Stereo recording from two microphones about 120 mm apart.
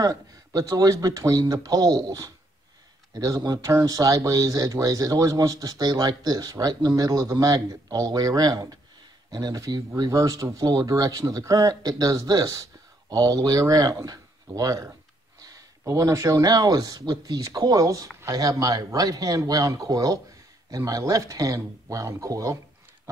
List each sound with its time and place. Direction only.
0.0 s speech: 30° right (ahead or behind)